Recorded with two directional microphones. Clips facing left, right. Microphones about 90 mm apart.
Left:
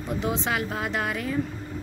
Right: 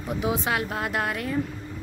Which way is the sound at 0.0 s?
5° right (ahead or behind).